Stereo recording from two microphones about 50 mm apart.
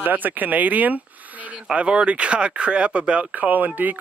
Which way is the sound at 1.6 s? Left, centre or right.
Centre.